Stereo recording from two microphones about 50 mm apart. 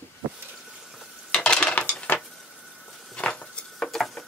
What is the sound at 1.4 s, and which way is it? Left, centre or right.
Stir, centre.